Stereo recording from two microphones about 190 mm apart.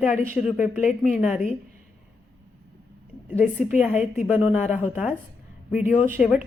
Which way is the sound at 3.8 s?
5° right (ahead or behind).